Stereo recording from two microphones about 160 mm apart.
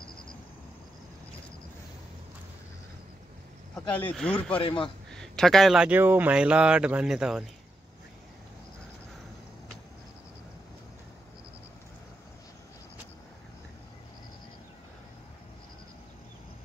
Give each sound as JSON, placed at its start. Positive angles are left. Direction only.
{"t": 3.7, "sound": "speech", "side_deg": 10}
{"t": 4.6, "sound": "speech", "side_deg": 30}
{"t": 5.1, "sound": "speech", "side_deg": 5}